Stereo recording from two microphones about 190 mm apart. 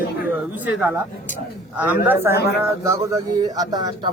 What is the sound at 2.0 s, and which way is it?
Speech, 10° right (ahead or behind).